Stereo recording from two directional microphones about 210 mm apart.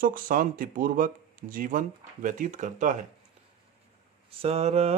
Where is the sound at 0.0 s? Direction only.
40° right (ahead or behind).